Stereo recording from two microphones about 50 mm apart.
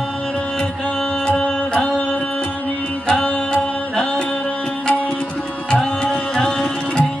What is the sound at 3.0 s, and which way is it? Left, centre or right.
Music, centre.